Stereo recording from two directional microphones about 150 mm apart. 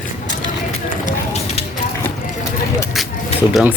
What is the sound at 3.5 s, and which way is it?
Speech, 5° right (ahead or behind).